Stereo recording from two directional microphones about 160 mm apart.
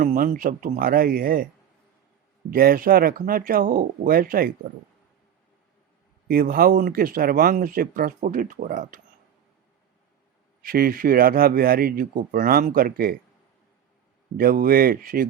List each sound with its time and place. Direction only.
0.0 s speech: 55° right (ahead or behind)
2.5 s speech: 65° right (ahead or behind)
6.2 s speech: 65° right (ahead or behind)
10.6 s speech: 65° right (ahead or behind)
14.3 s speech: 65° right (ahead or behind)